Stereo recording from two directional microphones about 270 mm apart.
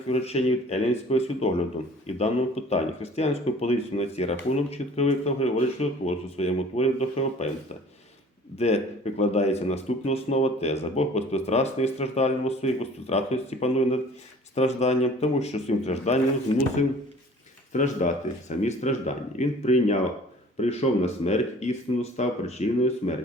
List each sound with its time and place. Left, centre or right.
0.1 s speech: left
8.5 s speech: left
17.7 s speech: left